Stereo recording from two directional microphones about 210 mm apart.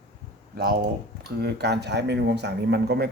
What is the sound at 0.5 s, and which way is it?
Speech, 45° right (ahead or behind).